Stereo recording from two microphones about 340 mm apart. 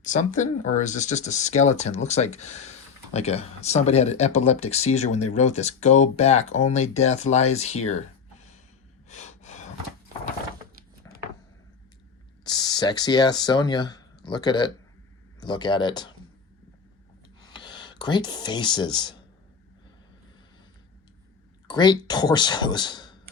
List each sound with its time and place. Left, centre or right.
0.0 s speech: left
9.0 s gasp: left
12.5 s speech: centre
17.5 s speech: centre
21.7 s speech: centre